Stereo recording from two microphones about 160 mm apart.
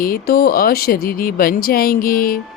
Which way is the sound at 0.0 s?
70° left (ahead or behind).